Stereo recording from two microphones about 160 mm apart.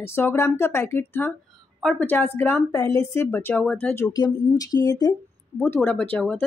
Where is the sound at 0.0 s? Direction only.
15° left (ahead or behind).